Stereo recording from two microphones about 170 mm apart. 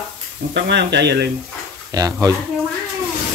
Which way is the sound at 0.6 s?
85° right.